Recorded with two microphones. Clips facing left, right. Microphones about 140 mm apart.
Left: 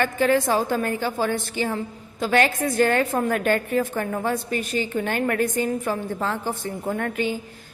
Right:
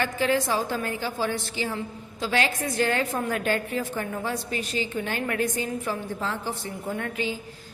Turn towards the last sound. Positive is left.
turn(degrees=55)  # may be behind; listen again after turning